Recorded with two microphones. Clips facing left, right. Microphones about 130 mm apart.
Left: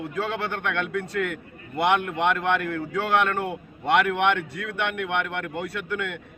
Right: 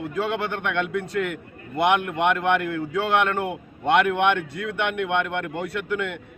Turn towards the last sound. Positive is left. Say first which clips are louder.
# right 3 dB
turn(degrees=-25)  # may be behind; listen again after turning